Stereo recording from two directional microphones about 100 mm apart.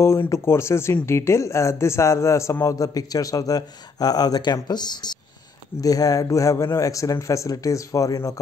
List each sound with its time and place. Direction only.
0.0 s a man's voice: 30° left (ahead or behind)